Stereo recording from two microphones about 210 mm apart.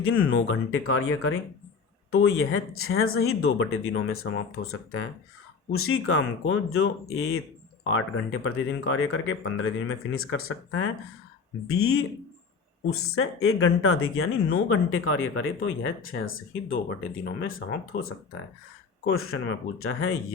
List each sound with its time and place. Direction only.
0.0 s speech: 80° left
7.9 s speech: 75° left (ahead or behind)
9.8 s speech: 85° left